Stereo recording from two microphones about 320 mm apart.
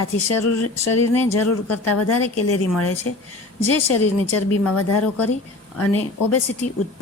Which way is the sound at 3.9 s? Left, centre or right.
Left.